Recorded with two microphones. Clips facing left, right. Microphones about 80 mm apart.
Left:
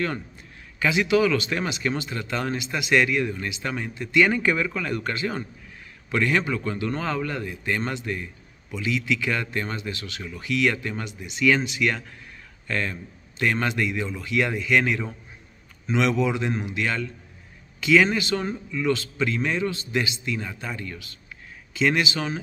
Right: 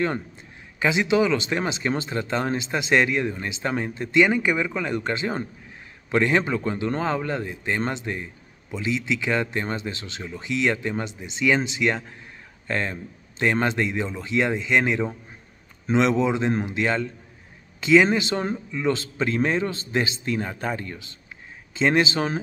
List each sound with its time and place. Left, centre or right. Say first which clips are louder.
0.7 s speech: even; right
4.2 s a man's voice: right 1 dB; centre; by 22.4 s right